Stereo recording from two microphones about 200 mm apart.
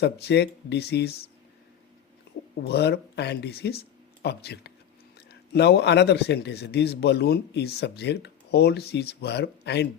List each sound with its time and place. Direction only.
0.0 s a man's voice: 55° left (ahead or behind)
2.6 s a man's voice: 55° left (ahead or behind)